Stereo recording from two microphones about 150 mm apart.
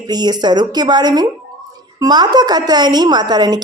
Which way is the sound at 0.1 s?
30° right (ahead or behind).